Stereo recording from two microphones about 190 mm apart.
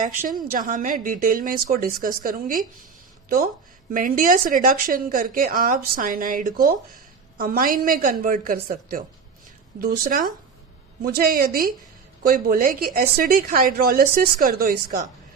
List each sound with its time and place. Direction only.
0.0 s speech: 45° right (ahead or behind)